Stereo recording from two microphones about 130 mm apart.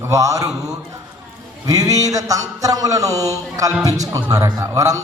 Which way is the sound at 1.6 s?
25° right (ahead or behind).